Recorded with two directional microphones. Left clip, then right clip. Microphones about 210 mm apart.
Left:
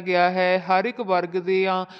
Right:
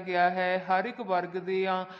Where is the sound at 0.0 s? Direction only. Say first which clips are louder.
Left 6 dB; 35° left (ahead or behind).